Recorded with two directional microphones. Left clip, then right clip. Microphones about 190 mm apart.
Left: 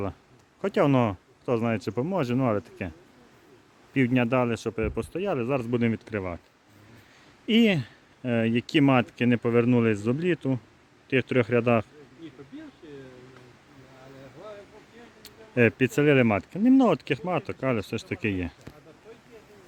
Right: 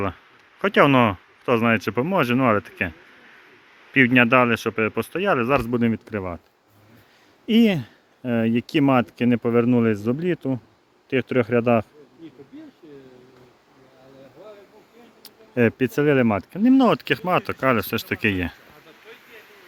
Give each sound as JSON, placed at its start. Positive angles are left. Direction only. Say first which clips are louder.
{"t": 0.6, "sound": "speech", "louder": "right 7 dB", "side_deg": 0}
{"t": 3.9, "sound": "speech", "louder": "right 9 dB", "side_deg": 0}
{"t": 7.4, "sound": "speech", "louder": "right 3 dB", "side_deg": 0}
{"t": 15.2, "sound": "speech", "louder": "right 2 dB", "side_deg": 0}